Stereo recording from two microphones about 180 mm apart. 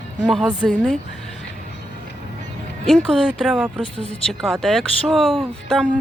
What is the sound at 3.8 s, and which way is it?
Speech, 30° left (ahead or behind).